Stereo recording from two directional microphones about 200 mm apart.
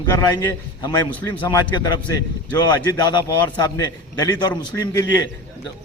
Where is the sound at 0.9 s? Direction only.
20° left (ahead or behind).